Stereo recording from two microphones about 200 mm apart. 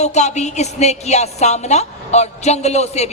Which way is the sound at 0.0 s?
35° left (ahead or behind).